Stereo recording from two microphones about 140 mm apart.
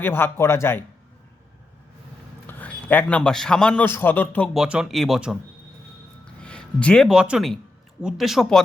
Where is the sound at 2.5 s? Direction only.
15° left (ahead or behind).